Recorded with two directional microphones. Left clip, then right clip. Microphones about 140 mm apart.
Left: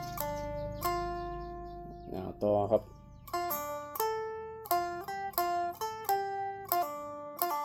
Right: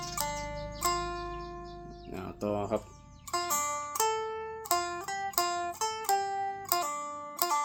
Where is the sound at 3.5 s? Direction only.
25° left (ahead or behind).